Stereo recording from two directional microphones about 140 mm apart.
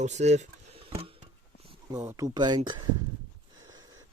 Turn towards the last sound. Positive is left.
turn(degrees=-25)  # may be behind; listen again after turning